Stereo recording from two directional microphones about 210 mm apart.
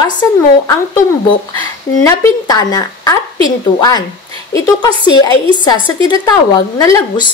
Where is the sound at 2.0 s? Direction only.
20° left (ahead or behind).